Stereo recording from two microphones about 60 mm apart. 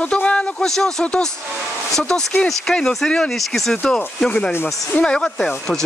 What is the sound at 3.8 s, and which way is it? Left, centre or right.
Speech, centre.